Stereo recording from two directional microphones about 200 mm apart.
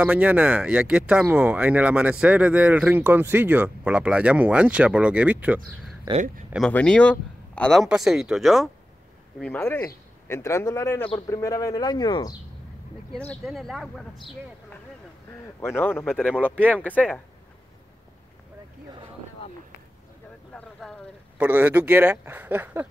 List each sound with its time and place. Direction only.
0.0 s speech: 5° right (ahead or behind)
6.7 s speech: 5° left (ahead or behind)
13.1 s speech: 5° left (ahead or behind)
15.4 s speech: 10° left (ahead or behind)
21.4 s speech: 5° right (ahead or behind)